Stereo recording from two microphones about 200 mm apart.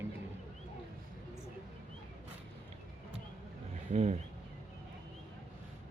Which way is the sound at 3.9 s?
35° right (ahead or behind).